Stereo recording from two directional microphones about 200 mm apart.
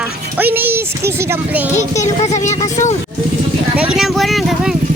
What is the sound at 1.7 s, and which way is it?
Speech, 35° left (ahead or behind).